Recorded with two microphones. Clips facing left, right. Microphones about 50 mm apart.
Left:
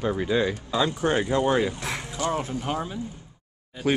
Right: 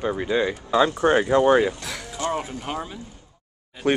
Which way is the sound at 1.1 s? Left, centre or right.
Centre.